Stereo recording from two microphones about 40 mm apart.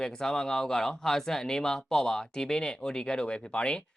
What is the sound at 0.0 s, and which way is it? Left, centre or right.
Speech, centre.